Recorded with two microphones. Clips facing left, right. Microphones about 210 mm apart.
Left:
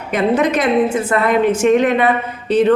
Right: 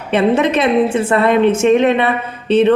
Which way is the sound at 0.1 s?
25° right (ahead or behind).